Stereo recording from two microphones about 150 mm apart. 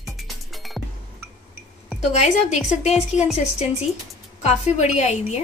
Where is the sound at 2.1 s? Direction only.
50° left (ahead or behind).